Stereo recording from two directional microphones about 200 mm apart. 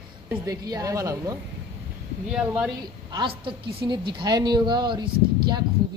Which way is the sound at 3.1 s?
25° right (ahead or behind).